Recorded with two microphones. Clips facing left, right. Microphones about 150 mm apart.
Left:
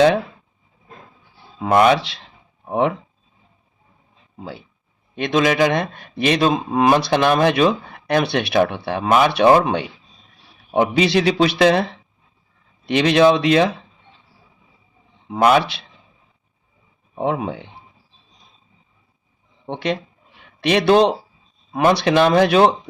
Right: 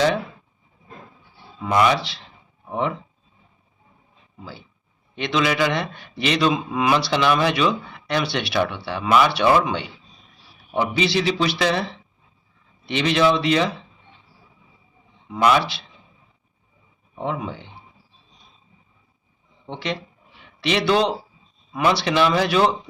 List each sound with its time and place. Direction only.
1.5 s speech: 55° left (ahead or behind)
4.4 s speech: 60° left (ahead or behind)
5.1 s a man's voice: 50° left (ahead or behind)
15.3 s speech: 50° left (ahead or behind)
17.2 s speech: 60° left (ahead or behind)
19.6 s speech: 55° left (ahead or behind)